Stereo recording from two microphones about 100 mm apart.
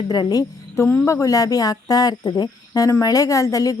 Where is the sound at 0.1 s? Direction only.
40° left (ahead or behind).